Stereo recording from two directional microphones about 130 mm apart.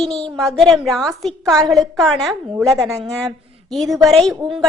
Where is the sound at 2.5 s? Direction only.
20° right (ahead or behind).